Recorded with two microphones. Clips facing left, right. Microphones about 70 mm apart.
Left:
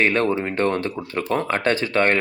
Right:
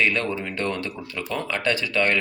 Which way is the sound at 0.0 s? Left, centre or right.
Left.